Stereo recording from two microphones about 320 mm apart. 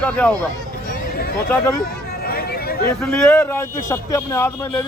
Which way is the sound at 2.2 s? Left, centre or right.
Left.